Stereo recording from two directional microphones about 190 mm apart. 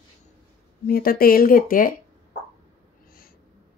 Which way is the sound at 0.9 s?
50° left (ahead or behind).